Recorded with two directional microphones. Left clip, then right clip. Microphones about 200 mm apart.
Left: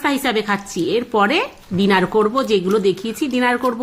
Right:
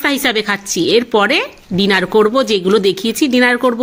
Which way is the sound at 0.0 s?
25° right (ahead or behind).